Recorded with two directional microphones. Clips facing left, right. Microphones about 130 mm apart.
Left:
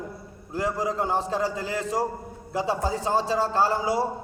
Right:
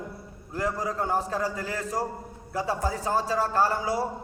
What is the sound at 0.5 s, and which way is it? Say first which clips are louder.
A man's voice: left 2 dB; 25° left (ahead or behind).